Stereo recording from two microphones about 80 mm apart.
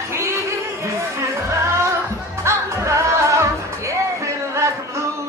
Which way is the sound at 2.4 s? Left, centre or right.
Right.